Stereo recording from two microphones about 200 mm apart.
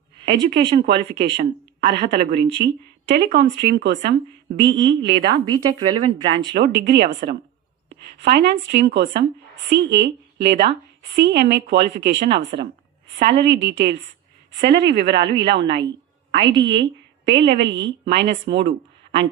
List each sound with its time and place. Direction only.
0.5 s speech: 55° right (ahead or behind)
5.5 s a woman's voice: 20° right (ahead or behind)
6.4 s speech: 60° right (ahead or behind)